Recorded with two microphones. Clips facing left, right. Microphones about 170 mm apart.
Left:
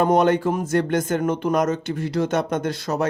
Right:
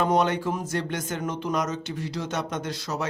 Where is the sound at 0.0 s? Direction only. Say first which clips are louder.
Left 6 dB; 50° left (ahead or behind).